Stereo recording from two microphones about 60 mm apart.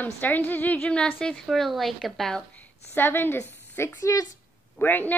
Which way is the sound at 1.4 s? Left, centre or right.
Centre.